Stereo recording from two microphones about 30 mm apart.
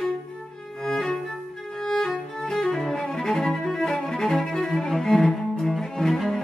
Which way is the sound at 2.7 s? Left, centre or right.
Centre.